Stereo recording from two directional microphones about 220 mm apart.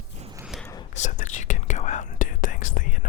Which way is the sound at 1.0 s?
35° left (ahead or behind).